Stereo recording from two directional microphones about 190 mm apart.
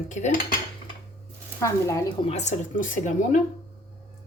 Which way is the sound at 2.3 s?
35° left (ahead or behind).